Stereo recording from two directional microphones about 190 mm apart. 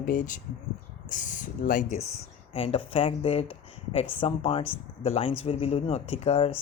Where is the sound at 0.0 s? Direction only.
45° left (ahead or behind).